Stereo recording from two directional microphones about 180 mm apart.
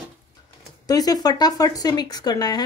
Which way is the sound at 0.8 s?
20° left (ahead or behind).